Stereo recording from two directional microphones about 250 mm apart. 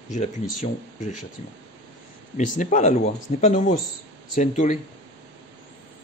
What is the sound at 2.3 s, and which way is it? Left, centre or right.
Speech, left.